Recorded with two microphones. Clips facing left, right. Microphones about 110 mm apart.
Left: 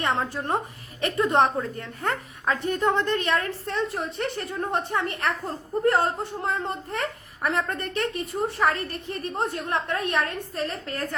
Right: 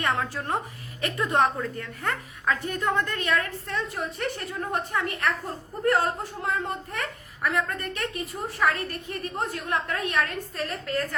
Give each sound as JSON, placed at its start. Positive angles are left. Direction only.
{"t": 0.0, "sound": "a woman's voice", "side_deg": 20}
{"t": 2.5, "sound": "a woman's voice", "side_deg": 20}